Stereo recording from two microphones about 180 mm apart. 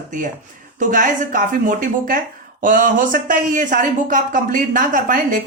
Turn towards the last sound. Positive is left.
turn(degrees=-45)  # may be behind; listen again after turning